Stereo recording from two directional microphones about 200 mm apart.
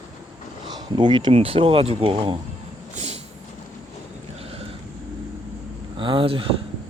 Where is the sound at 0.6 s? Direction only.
20° right (ahead or behind).